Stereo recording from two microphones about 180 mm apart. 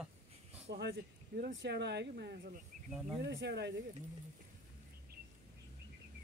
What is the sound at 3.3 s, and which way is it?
Speech, 80° right.